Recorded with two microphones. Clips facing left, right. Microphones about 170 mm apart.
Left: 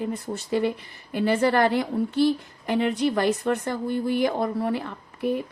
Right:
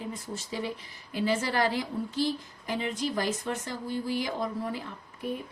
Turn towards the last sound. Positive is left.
turn(degrees=70)  # may be behind; listen again after turning